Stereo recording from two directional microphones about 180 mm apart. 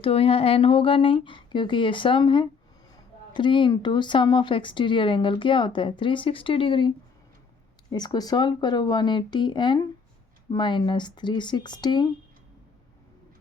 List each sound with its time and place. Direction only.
0.0 s speech: 30° left (ahead or behind)